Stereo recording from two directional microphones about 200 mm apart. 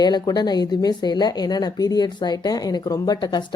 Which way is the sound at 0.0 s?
20° left (ahead or behind).